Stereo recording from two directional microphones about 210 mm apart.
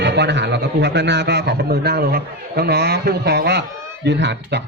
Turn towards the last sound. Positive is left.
turn(degrees=-55)  # may be behind; listen again after turning